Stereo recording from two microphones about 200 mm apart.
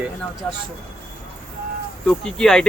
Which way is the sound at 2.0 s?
5° left (ahead or behind).